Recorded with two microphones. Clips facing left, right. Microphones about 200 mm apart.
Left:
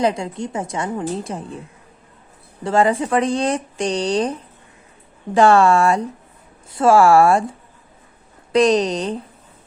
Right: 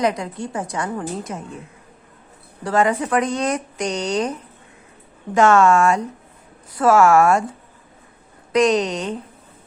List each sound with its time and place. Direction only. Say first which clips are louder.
0.0 s a woman's voice: left 1 dB; 30° left (ahead or behind)
2.6 s speech: left 2 dB; 30° left (ahead or behind)
8.5 s speech: left 2 dB; 35° left (ahead or behind)